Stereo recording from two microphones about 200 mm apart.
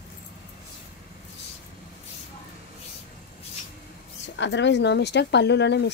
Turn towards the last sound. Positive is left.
turn(degrees=60)  # may be behind; listen again after turning